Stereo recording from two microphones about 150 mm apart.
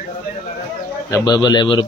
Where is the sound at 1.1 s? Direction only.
30° left (ahead or behind).